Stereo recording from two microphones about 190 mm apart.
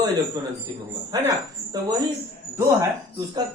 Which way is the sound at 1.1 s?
20° right (ahead or behind).